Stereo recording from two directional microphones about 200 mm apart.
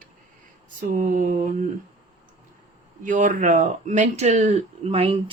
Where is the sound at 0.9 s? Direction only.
40° right (ahead or behind).